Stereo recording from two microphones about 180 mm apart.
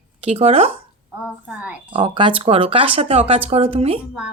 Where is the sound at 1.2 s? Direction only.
5° right (ahead or behind).